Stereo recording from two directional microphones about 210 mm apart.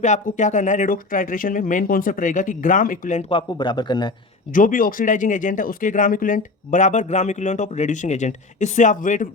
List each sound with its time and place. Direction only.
0.0 s speech: 35° left (ahead or behind)
4.5 s speech: 40° left (ahead or behind)